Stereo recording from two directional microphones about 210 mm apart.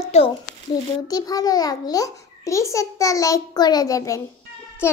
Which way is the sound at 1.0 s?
20° left (ahead or behind).